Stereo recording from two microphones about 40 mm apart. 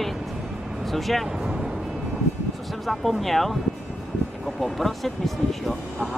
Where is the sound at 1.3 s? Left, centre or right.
Centre.